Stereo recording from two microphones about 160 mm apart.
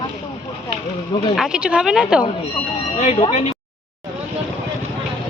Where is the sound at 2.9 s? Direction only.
45° left (ahead or behind).